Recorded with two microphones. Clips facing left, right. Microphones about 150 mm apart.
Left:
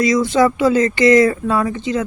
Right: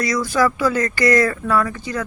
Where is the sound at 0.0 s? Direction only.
20° left (ahead or behind).